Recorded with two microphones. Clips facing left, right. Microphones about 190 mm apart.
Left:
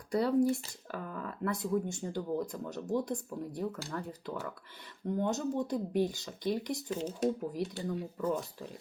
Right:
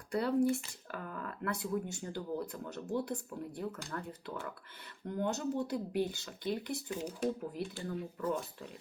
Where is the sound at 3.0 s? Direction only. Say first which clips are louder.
Left 3 dB; 5° right (ahead or behind).